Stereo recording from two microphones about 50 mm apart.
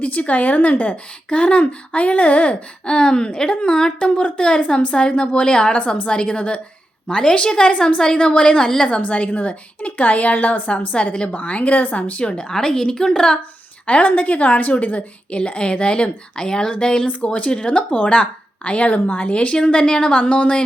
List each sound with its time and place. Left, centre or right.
0.0 s a woman's voice: left
2.8 s a woman's voice: centre; by 10.6 s left
10.7 s a woman's voice: left
13.8 s a woman's voice: left